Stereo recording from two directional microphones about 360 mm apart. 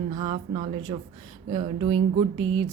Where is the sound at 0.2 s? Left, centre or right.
Centre.